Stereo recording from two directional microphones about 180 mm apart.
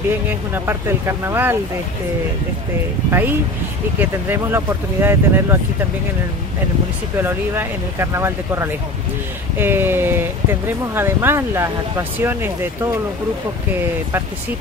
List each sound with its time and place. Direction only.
0.7 s speech: 15° right (ahead or behind)
3.1 s speech: 10° right (ahead or behind)
7.2 s speech: 10° right (ahead or behind)